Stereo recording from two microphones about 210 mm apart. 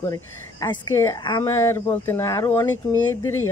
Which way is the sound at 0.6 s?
15° left (ahead or behind).